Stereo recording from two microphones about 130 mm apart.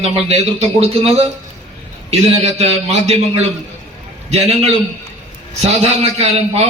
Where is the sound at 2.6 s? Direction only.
55° right (ahead or behind).